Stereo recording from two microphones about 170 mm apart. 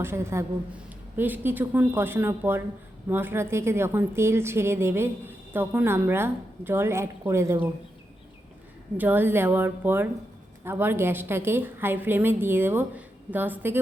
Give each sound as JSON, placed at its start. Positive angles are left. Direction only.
{"t": 0.0, "sound": "a woman's voice", "side_deg": -15}
{"t": 9.0, "sound": "a woman's voice", "side_deg": -10}